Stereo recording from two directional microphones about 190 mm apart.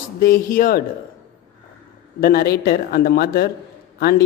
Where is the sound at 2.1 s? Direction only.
50° left (ahead or behind).